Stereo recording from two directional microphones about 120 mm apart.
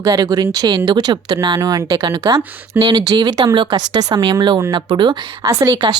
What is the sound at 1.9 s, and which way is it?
Speech, 45° right (ahead or behind).